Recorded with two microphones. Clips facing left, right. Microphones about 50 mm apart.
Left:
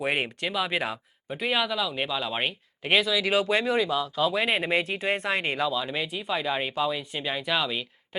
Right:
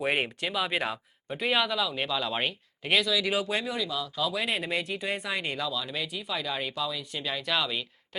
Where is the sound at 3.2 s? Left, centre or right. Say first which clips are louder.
Left 5 dB; left.